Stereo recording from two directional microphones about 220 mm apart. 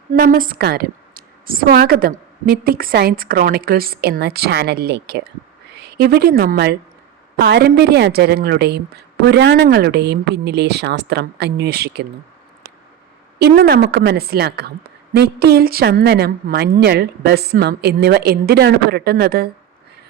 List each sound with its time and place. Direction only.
0.1 s a woman's voice: 40° right (ahead or behind)
13.6 s a woman's voice: 45° right (ahead or behind)